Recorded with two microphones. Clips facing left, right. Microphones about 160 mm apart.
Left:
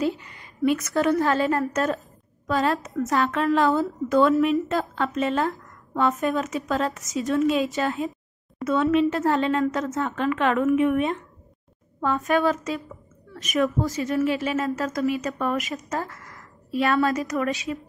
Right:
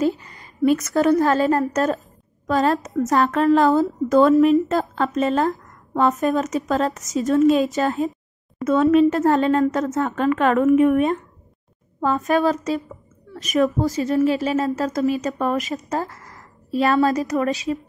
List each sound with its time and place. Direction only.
0.0 s a woman's voice: 40° right (ahead or behind)